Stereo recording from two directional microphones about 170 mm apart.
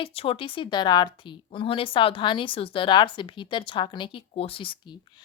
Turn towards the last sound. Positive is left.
turn(degrees=30)  # may be behind; listen again after turning